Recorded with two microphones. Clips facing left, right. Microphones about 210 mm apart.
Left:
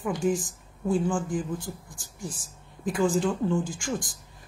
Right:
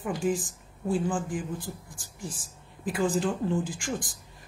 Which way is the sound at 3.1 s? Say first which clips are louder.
Left 2 dB; 35° right (ahead or behind).